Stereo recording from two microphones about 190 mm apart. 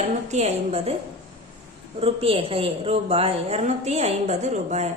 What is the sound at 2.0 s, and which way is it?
A woman's voice, 30° right (ahead or behind).